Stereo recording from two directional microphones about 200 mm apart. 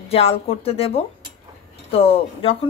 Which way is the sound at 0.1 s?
30° left (ahead or behind).